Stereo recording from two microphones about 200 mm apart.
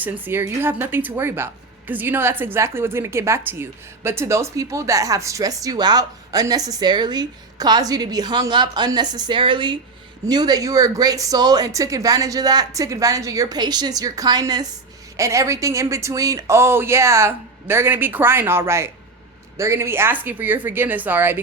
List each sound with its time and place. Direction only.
0.0 s a woman's voice: 10° right (ahead or behind)